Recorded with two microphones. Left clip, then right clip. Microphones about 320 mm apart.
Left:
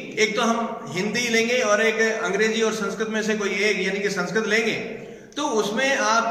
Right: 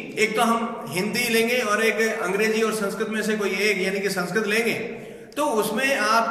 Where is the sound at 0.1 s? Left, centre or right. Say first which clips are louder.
Even; centre.